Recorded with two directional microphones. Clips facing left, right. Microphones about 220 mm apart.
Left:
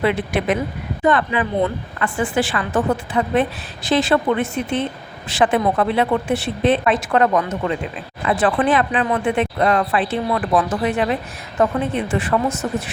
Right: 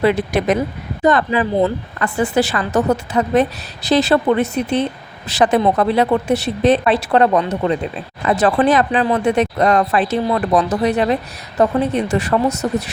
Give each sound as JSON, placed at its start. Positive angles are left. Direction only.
{"t": 0.0, "sound": "speech", "side_deg": -40}